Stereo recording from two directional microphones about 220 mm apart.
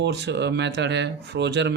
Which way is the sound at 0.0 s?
50° right (ahead or behind).